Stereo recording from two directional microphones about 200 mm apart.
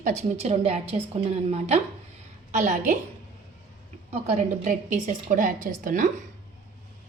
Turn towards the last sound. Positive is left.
turn(degrees=-40)  # may be behind; listen again after turning